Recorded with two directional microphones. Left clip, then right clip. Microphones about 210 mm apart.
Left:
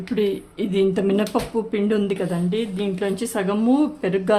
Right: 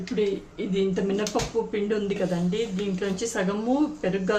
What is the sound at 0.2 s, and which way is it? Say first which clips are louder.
Speech: left 4 dB; 55° left (ahead or behind).